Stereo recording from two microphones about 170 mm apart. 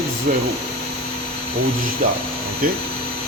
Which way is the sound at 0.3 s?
60° right (ahead or behind).